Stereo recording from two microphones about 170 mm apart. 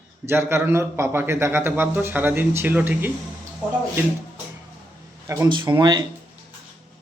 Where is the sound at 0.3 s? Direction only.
15° right (ahead or behind).